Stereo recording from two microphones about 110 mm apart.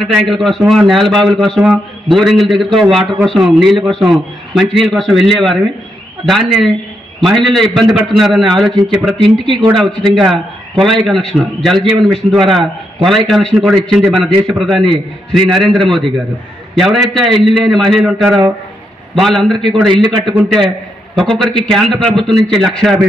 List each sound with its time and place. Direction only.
0.0 s a man's voice: centre (ahead or behind)
21.1 s a man's voice: centre (ahead or behind)